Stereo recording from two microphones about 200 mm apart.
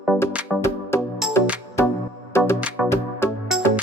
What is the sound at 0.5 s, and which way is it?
Music, 10° left (ahead or behind).